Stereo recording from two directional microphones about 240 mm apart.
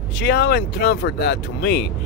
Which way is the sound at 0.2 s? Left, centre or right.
Left.